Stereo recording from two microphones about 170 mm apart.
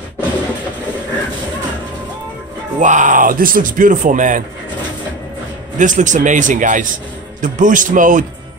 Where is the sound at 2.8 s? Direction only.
45° right (ahead or behind).